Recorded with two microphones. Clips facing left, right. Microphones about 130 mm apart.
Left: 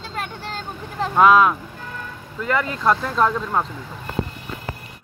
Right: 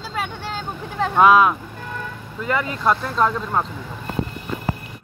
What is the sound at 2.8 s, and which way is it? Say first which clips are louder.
Speech: even; 5° right (ahead or behind).